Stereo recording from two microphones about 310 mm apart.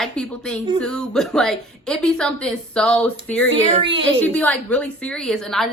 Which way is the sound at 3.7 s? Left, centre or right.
Centre.